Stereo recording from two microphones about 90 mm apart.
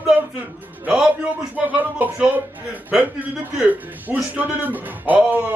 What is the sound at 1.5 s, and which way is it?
Speech, 15° right (ahead or behind).